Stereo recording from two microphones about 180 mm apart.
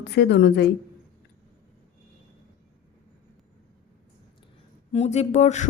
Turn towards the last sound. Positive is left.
turn(degrees=40)  # may be behind; listen again after turning